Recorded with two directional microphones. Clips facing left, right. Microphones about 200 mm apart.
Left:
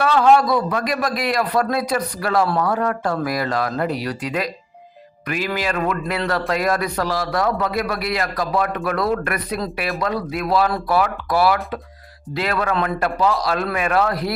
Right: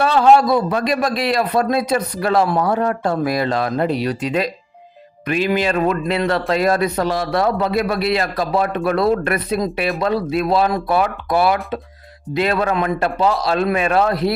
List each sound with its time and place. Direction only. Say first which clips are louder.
0.0 s speech: right 2 dB; 25° right (ahead or behind)